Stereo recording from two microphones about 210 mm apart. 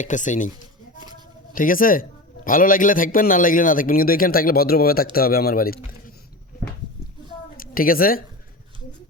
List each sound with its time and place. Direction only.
0.0 s a man's voice: 35° left (ahead or behind)
1.5 s a man's voice: 40° left (ahead or behind)
7.5 s a woman's voice: 45° left (ahead or behind)